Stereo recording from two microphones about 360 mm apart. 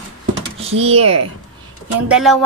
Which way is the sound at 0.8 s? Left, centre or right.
Centre.